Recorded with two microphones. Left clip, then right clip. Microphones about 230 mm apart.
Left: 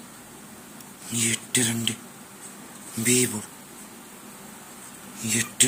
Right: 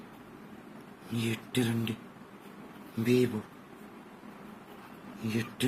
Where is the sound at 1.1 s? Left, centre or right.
Centre.